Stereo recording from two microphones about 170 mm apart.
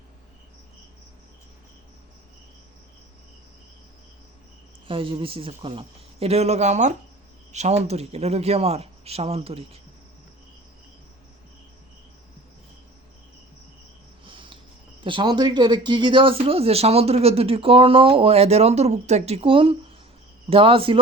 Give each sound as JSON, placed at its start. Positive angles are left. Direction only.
{"t": 4.9, "sound": "speech", "side_deg": -30}
{"t": 14.3, "sound": "cricket", "side_deg": -30}
{"t": 15.0, "sound": "speech", "side_deg": -30}